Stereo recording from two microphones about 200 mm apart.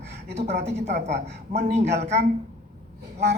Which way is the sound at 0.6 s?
60° right (ahead or behind).